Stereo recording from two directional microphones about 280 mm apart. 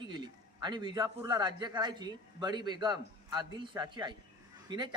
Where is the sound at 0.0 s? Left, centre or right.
Centre.